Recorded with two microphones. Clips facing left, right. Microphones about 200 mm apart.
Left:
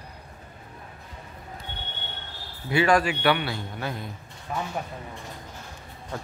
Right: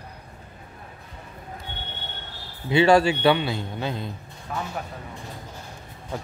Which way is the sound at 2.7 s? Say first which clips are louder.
Right 4 dB; 25° right (ahead or behind).